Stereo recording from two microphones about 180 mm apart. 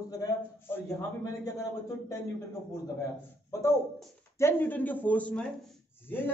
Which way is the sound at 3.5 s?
15° left (ahead or behind).